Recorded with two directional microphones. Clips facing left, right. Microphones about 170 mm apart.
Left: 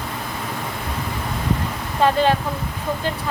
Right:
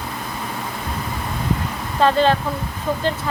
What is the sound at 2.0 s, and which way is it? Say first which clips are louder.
Speech: right 1 dB; 10° left (ahead or behind).